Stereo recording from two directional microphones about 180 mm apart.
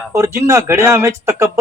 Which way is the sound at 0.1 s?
15° right (ahead or behind).